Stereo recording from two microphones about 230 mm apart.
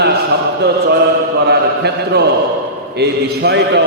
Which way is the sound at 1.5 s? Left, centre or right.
Right.